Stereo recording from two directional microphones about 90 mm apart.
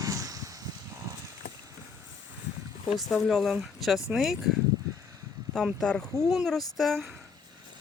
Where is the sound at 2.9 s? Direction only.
Centre (ahead or behind).